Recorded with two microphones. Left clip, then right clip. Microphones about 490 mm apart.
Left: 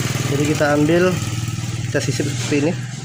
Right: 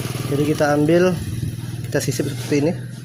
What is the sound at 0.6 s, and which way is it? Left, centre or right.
Speech, right.